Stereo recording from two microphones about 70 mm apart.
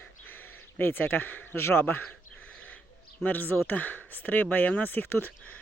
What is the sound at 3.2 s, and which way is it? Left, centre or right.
Speech, left.